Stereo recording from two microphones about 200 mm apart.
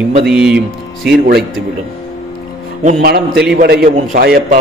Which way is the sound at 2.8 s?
50° right (ahead or behind).